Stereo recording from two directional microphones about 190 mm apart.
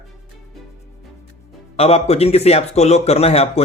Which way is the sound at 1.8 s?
35° left (ahead or behind).